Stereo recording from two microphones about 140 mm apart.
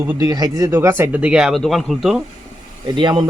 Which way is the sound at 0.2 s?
25° right (ahead or behind).